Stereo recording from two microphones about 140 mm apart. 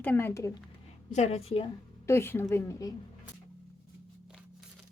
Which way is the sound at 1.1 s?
50° left (ahead or behind).